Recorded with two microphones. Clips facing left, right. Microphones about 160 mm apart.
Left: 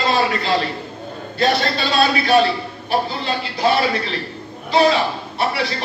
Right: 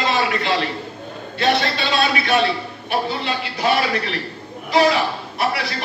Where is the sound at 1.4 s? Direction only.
40° left (ahead or behind).